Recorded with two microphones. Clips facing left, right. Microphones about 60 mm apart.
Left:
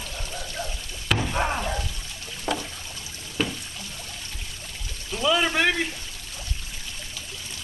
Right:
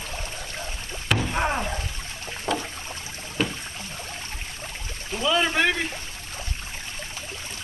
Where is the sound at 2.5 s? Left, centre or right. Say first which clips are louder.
Right 1 dB; centre.